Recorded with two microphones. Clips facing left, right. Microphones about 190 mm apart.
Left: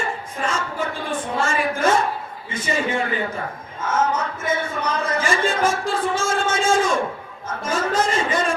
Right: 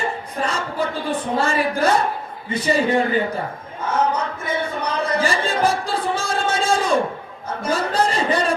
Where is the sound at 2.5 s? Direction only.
35° right (ahead or behind).